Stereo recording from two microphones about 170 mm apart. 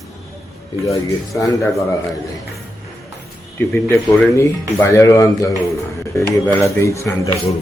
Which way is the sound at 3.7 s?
15° left (ahead or behind).